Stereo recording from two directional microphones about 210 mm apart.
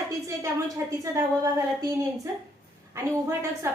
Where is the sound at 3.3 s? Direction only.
10° right (ahead or behind).